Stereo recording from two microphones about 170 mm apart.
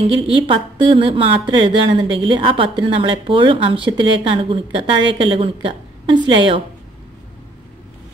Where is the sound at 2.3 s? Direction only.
30° right (ahead or behind).